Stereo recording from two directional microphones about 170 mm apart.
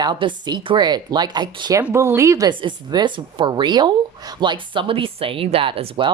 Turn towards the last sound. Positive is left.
turn(degrees=-35)  # may be behind; listen again after turning